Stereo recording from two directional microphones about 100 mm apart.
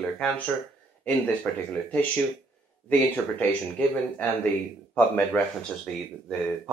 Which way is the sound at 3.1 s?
15° left (ahead or behind).